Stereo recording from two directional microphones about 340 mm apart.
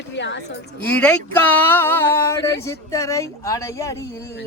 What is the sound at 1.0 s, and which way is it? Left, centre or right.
Speech, centre.